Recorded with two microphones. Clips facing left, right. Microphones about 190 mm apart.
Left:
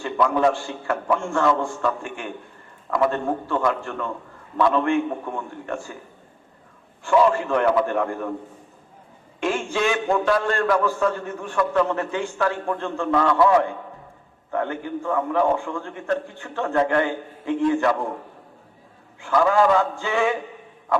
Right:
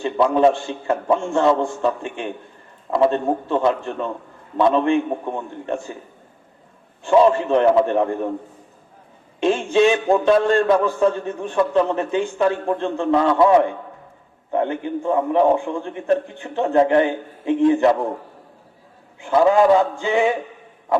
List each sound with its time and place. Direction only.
0.0 s a man's voice: 20° right (ahead or behind)
7.0 s a man's voice: 25° right (ahead or behind)
9.4 s a man's voice: 20° right (ahead or behind)
19.2 s a man's voice: 20° right (ahead or behind)